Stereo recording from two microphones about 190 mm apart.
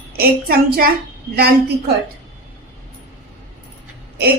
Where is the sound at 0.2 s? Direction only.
55° right (ahead or behind).